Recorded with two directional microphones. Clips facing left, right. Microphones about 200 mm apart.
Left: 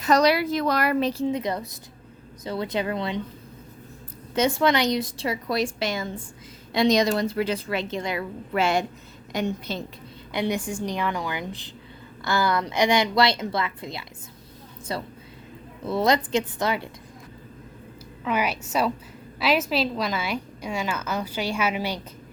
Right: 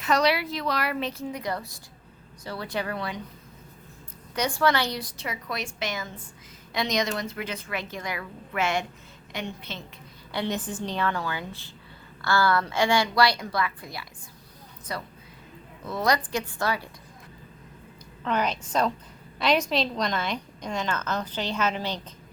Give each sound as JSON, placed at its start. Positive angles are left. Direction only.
{"t": 0.0, "sound": "a woman's voice", "side_deg": 40}
{"t": 4.4, "sound": "a woman's voice", "side_deg": 25}
{"t": 10.3, "sound": "a woman's voice", "side_deg": 10}
{"t": 18.3, "sound": "a woman's voice", "side_deg": 10}